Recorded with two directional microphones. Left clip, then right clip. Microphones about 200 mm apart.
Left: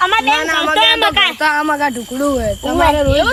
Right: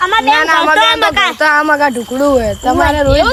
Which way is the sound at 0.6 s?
45° right (ahead or behind).